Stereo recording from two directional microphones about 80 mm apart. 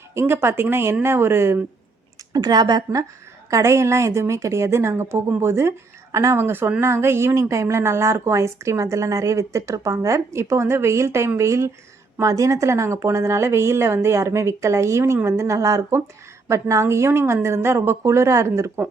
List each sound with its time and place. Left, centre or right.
0.1 s a woman's voice: right
2.3 s speech: right
3.5 s a woman's voice: right